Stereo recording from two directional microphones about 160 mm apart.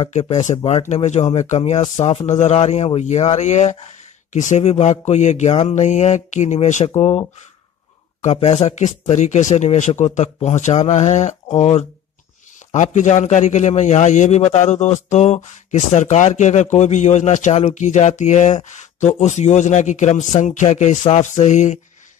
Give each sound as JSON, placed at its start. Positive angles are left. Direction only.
{"t": 0.0, "sound": "speech", "side_deg": 40}